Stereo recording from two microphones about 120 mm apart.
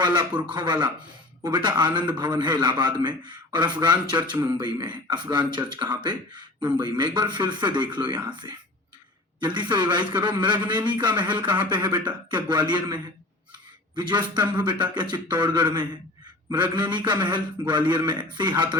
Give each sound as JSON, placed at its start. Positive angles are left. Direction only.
{"t": 0.0, "sound": "a man's voice", "side_deg": -40}
{"t": 8.4, "sound": "speech", "side_deg": -25}
{"t": 9.4, "sound": "a man's voice", "side_deg": -40}
{"t": 11.9, "sound": "speech", "side_deg": -10}
{"t": 12.3, "sound": "a man's voice", "side_deg": -40}